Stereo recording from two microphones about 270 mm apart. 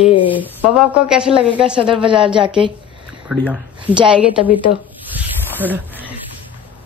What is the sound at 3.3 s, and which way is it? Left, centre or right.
A man's voice, centre.